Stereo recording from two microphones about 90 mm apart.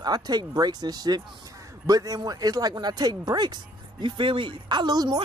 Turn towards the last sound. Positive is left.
turn(degrees=-50)  # may be behind; listen again after turning